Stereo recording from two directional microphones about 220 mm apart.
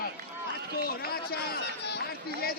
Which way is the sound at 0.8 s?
45° left (ahead or behind).